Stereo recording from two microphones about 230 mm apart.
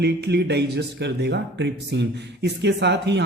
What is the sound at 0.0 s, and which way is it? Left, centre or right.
Speech, right.